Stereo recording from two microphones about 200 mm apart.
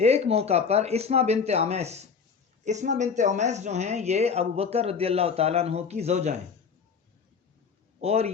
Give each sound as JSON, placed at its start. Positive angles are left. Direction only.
{"t": 0.0, "sound": "speech", "side_deg": -30}
{"t": 8.0, "sound": "speech", "side_deg": -30}